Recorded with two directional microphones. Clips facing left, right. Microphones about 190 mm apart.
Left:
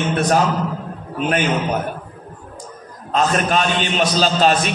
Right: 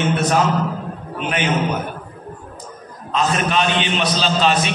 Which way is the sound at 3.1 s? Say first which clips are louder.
Left 1 dB; 45° left (ahead or behind).